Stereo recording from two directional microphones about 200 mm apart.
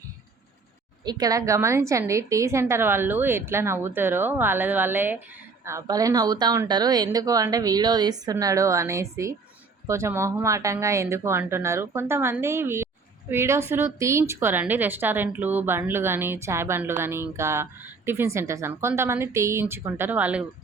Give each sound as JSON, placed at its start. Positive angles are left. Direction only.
{"t": 1.0, "sound": "a woman's voice", "side_deg": -20}